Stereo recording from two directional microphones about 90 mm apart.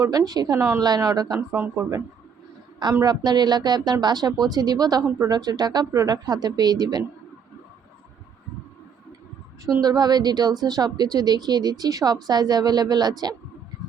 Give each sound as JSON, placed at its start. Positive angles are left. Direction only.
{"t": 0.0, "sound": "a woman's voice", "side_deg": -40}
{"t": 1.5, "sound": "speech", "side_deg": -30}
{"t": 3.0, "sound": "a woman's voice", "side_deg": -50}
{"t": 9.8, "sound": "a woman's voice", "side_deg": -50}